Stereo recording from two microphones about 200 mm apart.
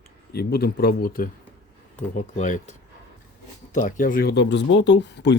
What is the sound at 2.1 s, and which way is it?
Speech, 35° left (ahead or behind).